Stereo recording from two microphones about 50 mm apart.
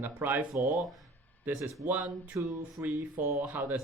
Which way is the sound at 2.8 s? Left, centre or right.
Right.